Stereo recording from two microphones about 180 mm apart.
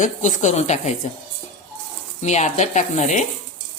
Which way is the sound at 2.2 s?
40° left (ahead or behind).